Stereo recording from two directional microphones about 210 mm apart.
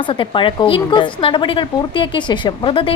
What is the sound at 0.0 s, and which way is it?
A woman's voice, 25° left (ahead or behind).